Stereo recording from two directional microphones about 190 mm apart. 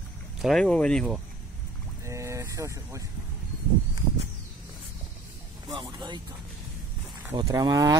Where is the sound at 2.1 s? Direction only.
15° right (ahead or behind).